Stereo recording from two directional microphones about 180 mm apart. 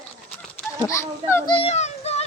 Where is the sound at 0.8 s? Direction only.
15° left (ahead or behind).